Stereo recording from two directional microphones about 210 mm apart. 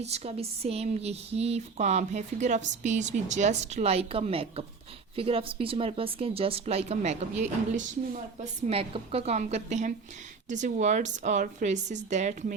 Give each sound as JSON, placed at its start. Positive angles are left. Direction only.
{"t": 0.0, "sound": "speech", "side_deg": -30}